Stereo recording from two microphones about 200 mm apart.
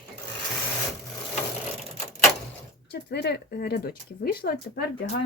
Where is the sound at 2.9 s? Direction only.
55° left (ahead or behind).